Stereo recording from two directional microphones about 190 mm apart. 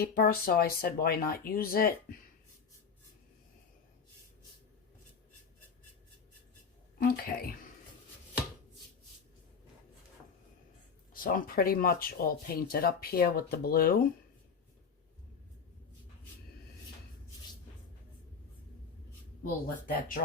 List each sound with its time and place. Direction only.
0.0 s speech: 50° left (ahead or behind)
7.0 s speech: 50° left (ahead or behind)
11.1 s speech: 45° left (ahead or behind)
19.6 s speech: 45° left (ahead or behind)